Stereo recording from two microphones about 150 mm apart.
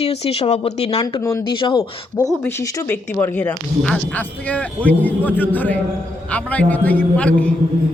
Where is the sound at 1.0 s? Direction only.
25° left (ahead or behind).